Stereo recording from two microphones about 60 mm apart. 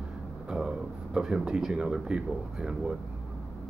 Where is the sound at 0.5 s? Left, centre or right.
Centre.